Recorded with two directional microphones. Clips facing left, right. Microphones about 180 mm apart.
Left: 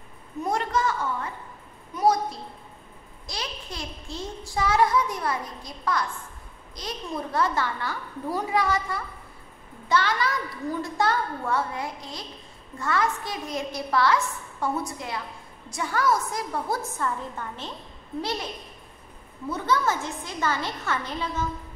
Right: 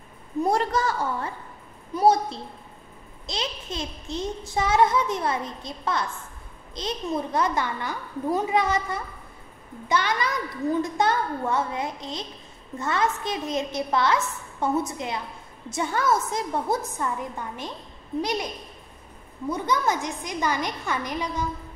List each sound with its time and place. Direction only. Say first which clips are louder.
0.4 s a woman's voice: right 3 dB; 35° right (ahead or behind)
2.0 s a sound: right 3 dB; 25° right (ahead or behind)
3.3 s a child's voice: right 4 dB; 20° right (ahead or behind)
19.5 s a woman's voice: even; 15° right (ahead or behind)